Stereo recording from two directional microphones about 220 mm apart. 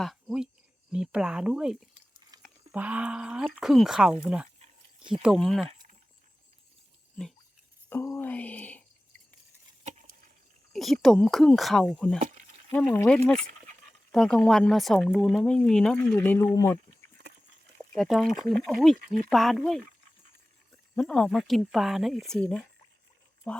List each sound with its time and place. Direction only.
0.0 s speech: centre (ahead or behind)
2.3 s chewing: 15° right (ahead or behind)
2.7 s speech: 5° right (ahead or behind)
4.6 s a sound: 20° right (ahead or behind)
5.2 s speech: centre (ahead or behind)
5.6 s a sound: 35° right (ahead or behind)
7.9 s a sound: 10° left (ahead or behind)
9.8 s a sound: 35° right (ahead or behind)
10.7 s speech: centre (ahead or behind)
17.9 s speech: centre (ahead or behind)
18.9 s speech: 35° right (ahead or behind)
19.3 s speech: centre (ahead or behind)
20.9 s speech: 5° left (ahead or behind)